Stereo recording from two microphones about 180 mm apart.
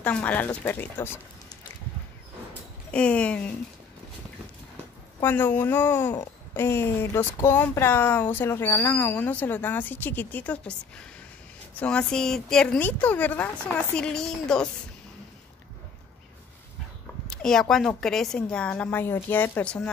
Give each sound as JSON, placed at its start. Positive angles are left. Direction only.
{"t": 0.0, "sound": "speech", "side_deg": 10}
{"t": 2.9, "sound": "speech", "side_deg": 5}
{"t": 5.2, "sound": "speech", "side_deg": 10}
{"t": 11.8, "sound": "speech", "side_deg": 5}
{"t": 17.3, "sound": "speech", "side_deg": 5}